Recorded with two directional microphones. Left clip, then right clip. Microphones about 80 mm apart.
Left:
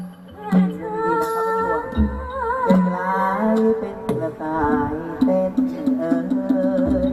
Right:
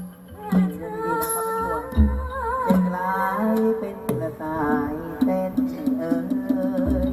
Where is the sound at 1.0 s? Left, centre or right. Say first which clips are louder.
Left 4 dB; right.